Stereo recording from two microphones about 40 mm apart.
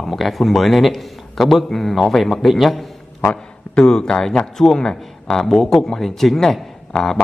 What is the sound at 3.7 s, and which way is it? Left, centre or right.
Speech, centre.